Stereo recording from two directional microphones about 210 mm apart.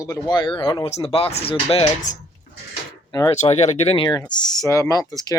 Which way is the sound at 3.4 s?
30° left (ahead or behind).